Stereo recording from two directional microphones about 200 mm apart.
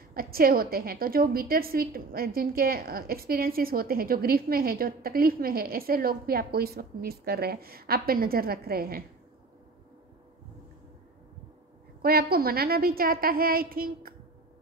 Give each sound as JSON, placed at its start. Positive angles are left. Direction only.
{"t": 0.1, "sound": "a woman's voice", "side_deg": -50}
{"t": 12.0, "sound": "a woman's voice", "side_deg": -50}